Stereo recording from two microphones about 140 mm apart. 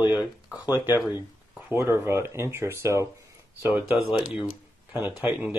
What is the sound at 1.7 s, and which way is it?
Speech, 20° right (ahead or behind).